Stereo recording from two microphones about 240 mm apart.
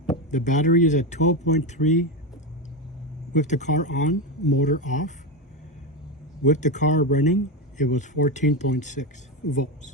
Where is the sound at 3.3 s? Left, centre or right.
Left.